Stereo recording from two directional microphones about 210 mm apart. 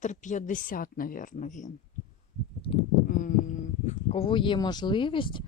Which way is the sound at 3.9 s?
30° left (ahead or behind).